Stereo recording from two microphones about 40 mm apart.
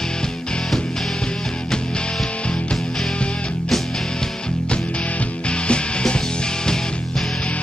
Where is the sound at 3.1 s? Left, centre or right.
Left.